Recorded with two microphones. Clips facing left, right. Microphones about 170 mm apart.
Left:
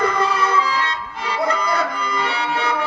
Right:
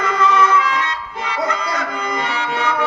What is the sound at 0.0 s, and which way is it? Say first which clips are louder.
Music: right 3 dB; 35° left (ahead or behind).